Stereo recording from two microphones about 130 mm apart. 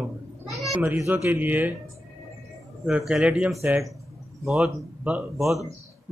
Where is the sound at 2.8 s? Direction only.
5° right (ahead or behind).